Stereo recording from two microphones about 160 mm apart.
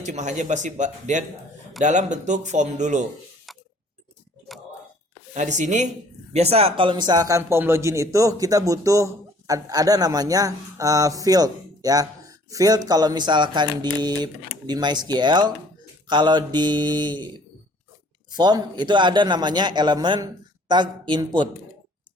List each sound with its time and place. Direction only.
0.0 s speech: 50° right (ahead or behind)
5.3 s speech: 50° right (ahead or behind); by 17.2 s 30° right (ahead or behind)
18.3 s speech: 25° right (ahead or behind)